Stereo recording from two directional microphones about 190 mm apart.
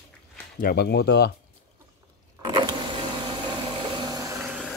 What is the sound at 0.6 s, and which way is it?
Speech, 55° left (ahead or behind).